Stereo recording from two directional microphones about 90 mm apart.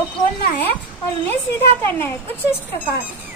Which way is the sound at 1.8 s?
25° left (ahead or behind).